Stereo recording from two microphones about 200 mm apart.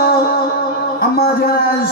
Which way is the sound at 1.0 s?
50° left (ahead or behind).